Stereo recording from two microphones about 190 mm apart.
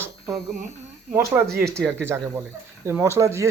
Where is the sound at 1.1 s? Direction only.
15° right (ahead or behind).